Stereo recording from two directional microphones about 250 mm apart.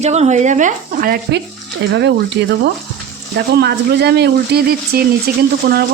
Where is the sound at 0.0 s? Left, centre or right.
Right.